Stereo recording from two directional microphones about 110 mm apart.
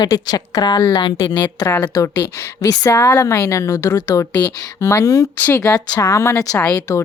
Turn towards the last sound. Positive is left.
turn(degrees=10)  # may be behind; listen again after turning